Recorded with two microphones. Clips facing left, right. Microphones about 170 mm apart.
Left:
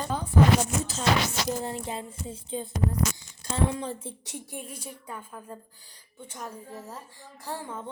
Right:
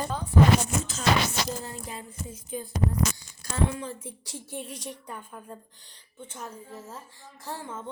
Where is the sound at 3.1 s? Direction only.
25° left (ahead or behind).